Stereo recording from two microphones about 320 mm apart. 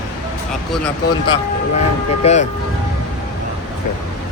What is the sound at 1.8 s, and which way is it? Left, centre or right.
Speech, centre.